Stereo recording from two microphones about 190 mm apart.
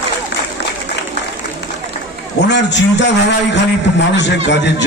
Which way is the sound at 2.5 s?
70° left (ahead or behind).